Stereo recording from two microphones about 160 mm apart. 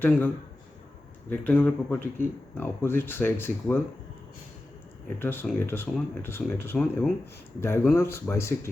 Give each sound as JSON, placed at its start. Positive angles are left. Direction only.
{"t": 0.0, "sound": "speech", "side_deg": 15}
{"t": 1.3, "sound": "speech", "side_deg": 10}
{"t": 5.2, "sound": "speech", "side_deg": 15}